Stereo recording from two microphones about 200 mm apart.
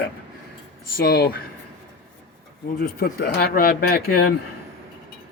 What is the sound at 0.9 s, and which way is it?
Speech, 55° left (ahead or behind).